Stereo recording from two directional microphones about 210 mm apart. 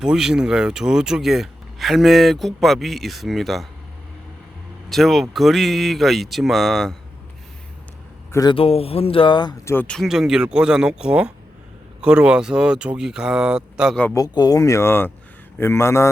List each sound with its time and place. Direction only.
0.0 s speech: 5° right (ahead or behind)
4.9 s speech: centre (ahead or behind)
8.3 s speech: 20° left (ahead or behind)
9.7 s speech: 5° left (ahead or behind)
14.0 s speech: 15° left (ahead or behind)